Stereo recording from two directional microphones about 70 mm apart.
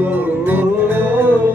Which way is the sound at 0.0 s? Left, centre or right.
Right.